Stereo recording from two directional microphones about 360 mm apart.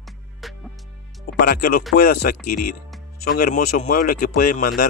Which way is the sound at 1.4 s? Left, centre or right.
Left.